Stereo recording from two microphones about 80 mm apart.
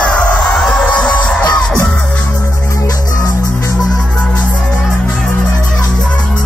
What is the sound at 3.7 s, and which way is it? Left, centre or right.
Music, centre.